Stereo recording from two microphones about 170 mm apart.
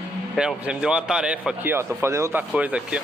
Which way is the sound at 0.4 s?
5° right (ahead or behind).